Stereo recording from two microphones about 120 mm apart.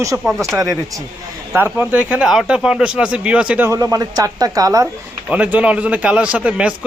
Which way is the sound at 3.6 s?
30° right (ahead or behind).